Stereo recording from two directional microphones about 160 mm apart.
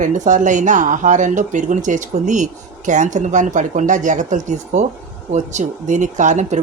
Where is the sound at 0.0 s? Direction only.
50° right (ahead or behind).